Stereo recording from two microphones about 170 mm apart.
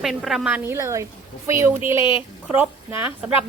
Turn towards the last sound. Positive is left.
turn(degrees=-10)  # may be behind; listen again after turning